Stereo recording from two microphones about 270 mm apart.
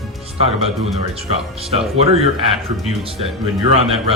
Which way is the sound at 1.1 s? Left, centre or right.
Right.